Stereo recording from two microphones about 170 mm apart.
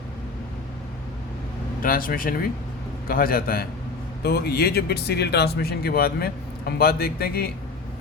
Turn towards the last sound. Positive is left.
turn(degrees=65)  # may be behind; listen again after turning